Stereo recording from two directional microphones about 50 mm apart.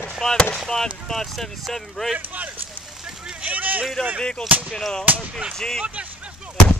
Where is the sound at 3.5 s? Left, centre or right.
Right.